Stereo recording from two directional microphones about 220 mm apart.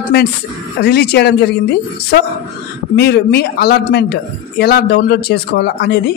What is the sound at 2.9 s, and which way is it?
A man's voice, 50° left (ahead or behind).